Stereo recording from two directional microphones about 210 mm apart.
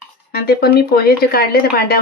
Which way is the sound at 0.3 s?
50° left (ahead or behind).